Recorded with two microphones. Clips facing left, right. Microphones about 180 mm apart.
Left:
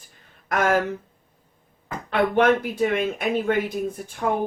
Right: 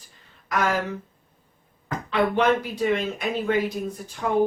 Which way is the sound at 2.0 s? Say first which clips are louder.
Left 2 dB; 55° left (ahead or behind).